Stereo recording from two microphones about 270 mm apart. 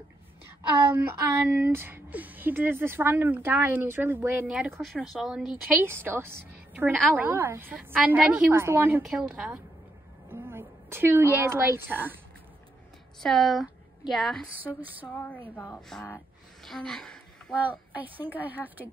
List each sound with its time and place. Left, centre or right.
0.8 s a woman's voice: centre
13.2 s speech: centre
15.5 s a woman's voice: centre